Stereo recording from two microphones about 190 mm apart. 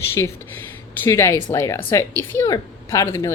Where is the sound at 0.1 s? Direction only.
15° left (ahead or behind).